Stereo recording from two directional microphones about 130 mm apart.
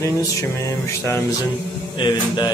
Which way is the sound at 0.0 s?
25° left (ahead or behind).